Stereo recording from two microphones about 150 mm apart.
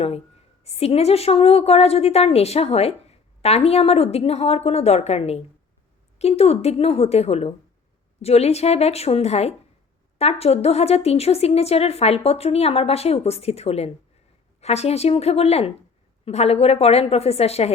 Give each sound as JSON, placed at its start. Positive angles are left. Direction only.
{"t": 0.6, "sound": "a woman's voice", "side_deg": 45}